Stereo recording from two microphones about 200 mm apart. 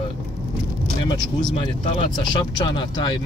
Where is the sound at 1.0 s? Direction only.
20° left (ahead or behind).